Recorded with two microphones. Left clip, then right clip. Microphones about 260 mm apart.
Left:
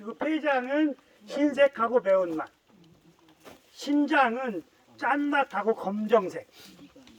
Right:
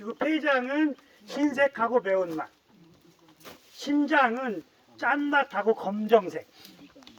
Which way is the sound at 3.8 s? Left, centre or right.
Right.